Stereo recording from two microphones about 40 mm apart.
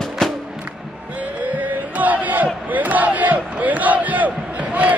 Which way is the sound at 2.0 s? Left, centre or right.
Right.